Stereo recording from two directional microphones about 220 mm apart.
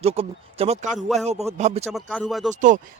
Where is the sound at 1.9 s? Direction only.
5° left (ahead or behind).